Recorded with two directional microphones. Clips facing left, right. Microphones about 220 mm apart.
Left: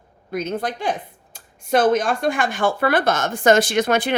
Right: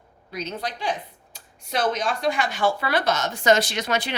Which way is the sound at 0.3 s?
50° left (ahead or behind).